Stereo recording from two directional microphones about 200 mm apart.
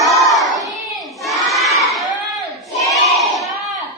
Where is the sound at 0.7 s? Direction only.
Centre (ahead or behind).